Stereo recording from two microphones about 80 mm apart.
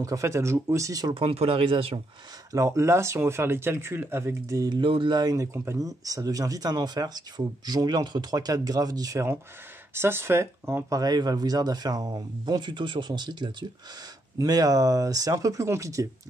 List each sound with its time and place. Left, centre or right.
0.0 s speech: right
1.0 s speech: right
2.5 s speech: right
4.6 s speech: right
5.3 s speech: right
9.9 s speech: right
10.9 s speech: right
14.4 s speech: right